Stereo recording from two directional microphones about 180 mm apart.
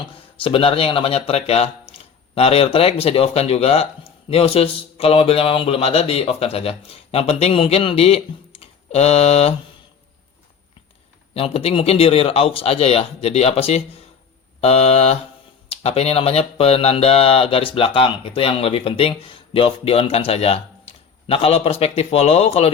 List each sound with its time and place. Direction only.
0.0 s speech: 30° left (ahead or behind)
11.3 s speech: 35° left (ahead or behind)